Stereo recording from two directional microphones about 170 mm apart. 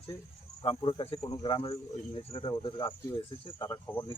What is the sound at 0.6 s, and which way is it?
Speech, 30° left (ahead or behind).